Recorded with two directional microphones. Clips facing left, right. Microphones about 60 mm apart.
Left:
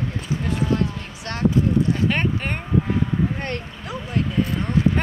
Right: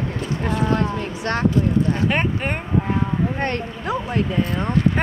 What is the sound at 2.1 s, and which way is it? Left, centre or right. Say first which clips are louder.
Speech: right 2 dB; centre.